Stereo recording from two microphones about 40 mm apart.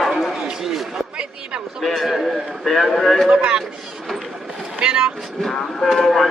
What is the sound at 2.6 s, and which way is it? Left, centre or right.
Speech, centre.